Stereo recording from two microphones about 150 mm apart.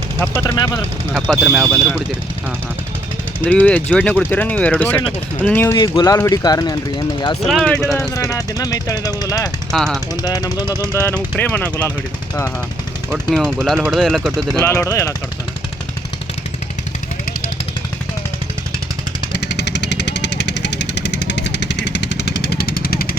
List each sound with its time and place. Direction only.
0.3 s speech: 20° left (ahead or behind)
1.1 s speech: 5° right (ahead or behind)
3.4 s speech: 10° left (ahead or behind)
5.7 s speech: 30° left (ahead or behind)
7.4 s speech: 5° left (ahead or behind)
8.1 s speech: 20° left (ahead or behind)
9.7 s speech: 5° left (ahead or behind)
10.2 s speech: 25° left (ahead or behind)
11.0 s speech: 10° left (ahead or behind)
13.3 s speech: centre (ahead or behind)
14.6 s speech: 20° left (ahead or behind)
22.2 s vehicle: 90° left